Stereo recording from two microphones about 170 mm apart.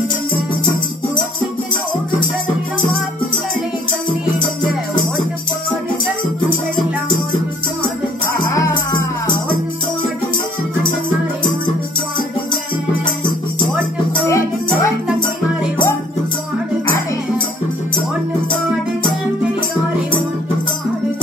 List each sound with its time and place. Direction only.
8.5 s music: 20° left (ahead or behind)
14.1 s music: 20° left (ahead or behind)